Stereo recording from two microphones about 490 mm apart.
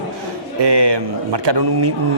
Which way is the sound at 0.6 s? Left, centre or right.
Right.